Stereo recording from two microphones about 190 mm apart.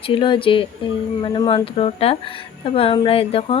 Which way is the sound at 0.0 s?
25° left (ahead or behind).